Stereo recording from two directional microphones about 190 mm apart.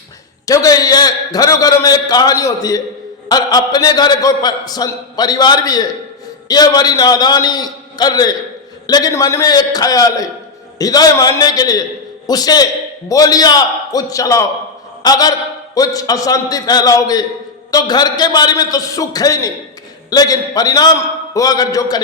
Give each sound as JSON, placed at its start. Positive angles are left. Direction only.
{"t": 0.4, "sound": "a man's voice", "side_deg": 20}